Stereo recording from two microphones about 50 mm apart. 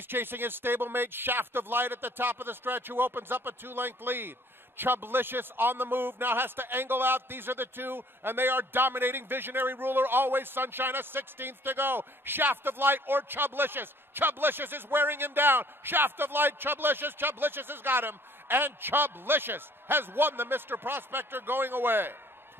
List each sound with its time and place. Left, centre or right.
0.1 s speech: right